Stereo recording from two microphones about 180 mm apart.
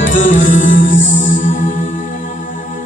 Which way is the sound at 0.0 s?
45° left (ahead or behind).